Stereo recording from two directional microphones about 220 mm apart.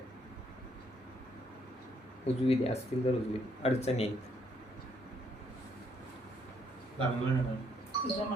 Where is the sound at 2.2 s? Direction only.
30° left (ahead or behind).